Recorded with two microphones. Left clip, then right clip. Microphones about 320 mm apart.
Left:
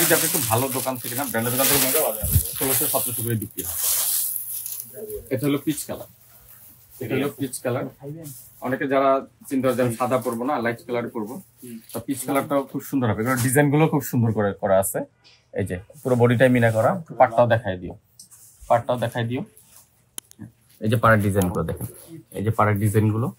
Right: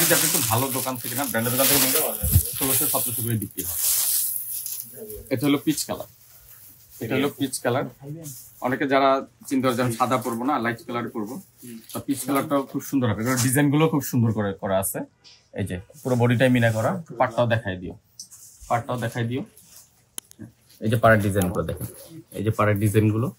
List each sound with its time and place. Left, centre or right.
0.0 s speech: centre
3.5 s speech: centre
5.4 s speech: centre
7.3 s speech: centre
20.2 s a sound: centre
20.8 s speech: centre
22.4 s speech: centre